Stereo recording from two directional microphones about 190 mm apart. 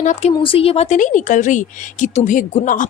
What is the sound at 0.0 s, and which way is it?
Speech, 35° left (ahead or behind).